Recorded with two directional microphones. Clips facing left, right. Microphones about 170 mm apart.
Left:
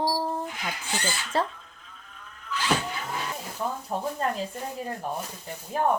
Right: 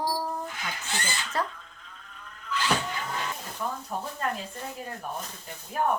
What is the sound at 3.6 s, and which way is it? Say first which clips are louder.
Speech: left 2 dB; 25° left (ahead or behind).